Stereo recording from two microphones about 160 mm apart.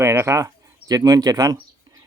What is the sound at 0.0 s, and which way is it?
Speech, 20° right (ahead or behind).